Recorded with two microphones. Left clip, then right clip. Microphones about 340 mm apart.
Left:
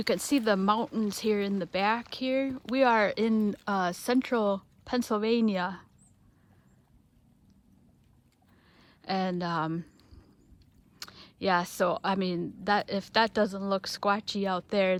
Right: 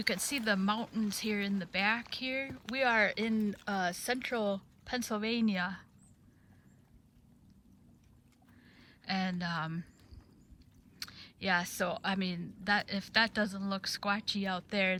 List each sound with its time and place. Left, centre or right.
0.1 s speech: centre
8.7 s a sound: centre
11.0 s speech: centre